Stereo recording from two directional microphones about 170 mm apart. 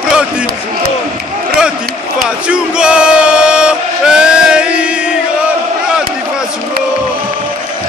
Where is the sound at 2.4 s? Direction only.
5° right (ahead or behind).